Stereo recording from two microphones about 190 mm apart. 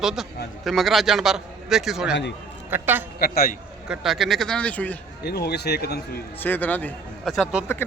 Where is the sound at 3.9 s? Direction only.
Centre (ahead or behind).